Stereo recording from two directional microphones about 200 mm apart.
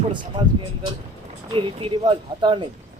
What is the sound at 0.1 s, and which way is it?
Speech, 25° right (ahead or behind).